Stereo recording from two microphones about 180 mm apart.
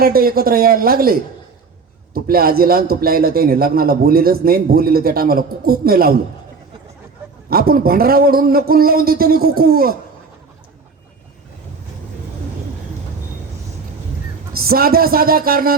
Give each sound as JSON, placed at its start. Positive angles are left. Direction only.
{"t": 0.0, "sound": "a man's voice", "side_deg": -55}
{"t": 7.5, "sound": "a man's voice", "side_deg": -55}
{"t": 14.5, "sound": "a man's voice", "side_deg": -55}